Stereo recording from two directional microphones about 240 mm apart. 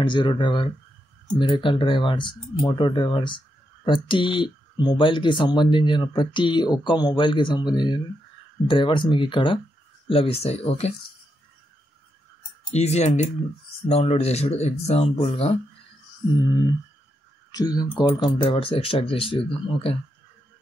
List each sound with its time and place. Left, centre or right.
0.0 s speech: centre
12.7 s speech: left